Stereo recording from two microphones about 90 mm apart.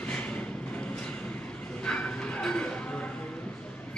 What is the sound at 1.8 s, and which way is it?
Bow-wow, 15° left (ahead or behind).